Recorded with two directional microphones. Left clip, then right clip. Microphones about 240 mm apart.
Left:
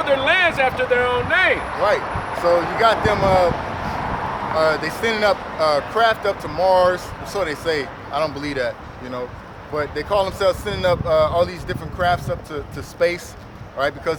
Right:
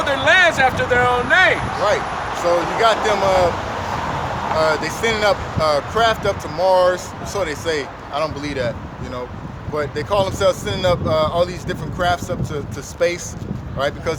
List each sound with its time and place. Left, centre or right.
0.0 s speech: centre
1.8 s speech: centre
4.5 s speech: centre
9.7 s speech: centre